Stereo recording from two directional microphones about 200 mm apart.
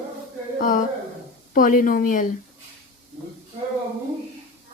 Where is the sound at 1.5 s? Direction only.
40° left (ahead or behind).